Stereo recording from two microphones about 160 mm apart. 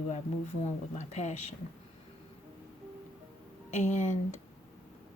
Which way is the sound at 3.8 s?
50° left (ahead or behind).